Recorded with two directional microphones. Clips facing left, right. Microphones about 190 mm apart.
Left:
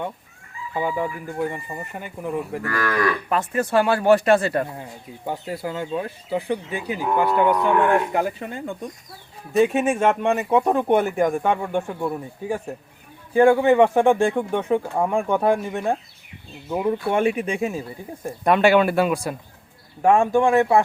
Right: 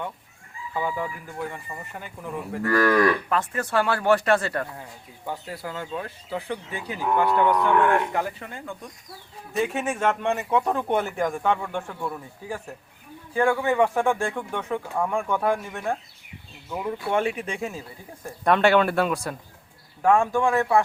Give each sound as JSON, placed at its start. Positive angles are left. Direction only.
{"t": 0.7, "sound": "speech", "side_deg": 20}
{"t": 2.6, "sound": "moo", "side_deg": -35}
{"t": 3.2, "sound": "speech", "side_deg": 15}
{"t": 20.0, "sound": "speech", "side_deg": 20}